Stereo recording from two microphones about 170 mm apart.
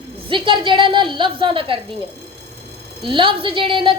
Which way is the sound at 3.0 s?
30° right (ahead or behind).